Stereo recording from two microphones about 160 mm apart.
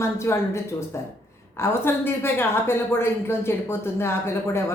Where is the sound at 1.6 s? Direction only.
15° left (ahead or behind).